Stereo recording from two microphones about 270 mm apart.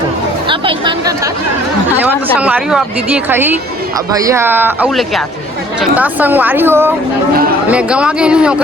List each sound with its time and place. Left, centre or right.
0.4 s a woman's voice: centre